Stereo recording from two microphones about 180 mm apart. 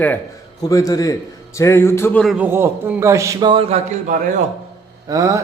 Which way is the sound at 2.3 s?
10° right (ahead or behind).